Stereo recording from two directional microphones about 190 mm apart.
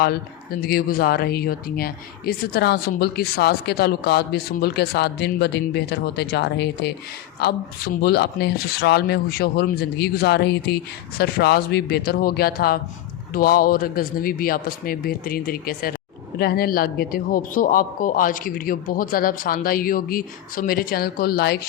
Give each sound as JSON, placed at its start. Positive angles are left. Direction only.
{"t": 0.6, "sound": "a man's voice", "side_deg": 50}